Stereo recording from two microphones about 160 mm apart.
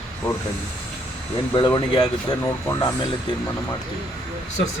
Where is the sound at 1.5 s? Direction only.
30° left (ahead or behind).